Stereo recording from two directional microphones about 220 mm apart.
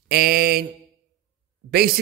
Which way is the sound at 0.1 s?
45° right (ahead or behind).